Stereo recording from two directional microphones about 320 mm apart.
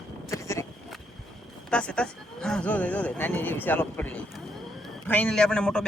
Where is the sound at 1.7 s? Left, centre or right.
Centre.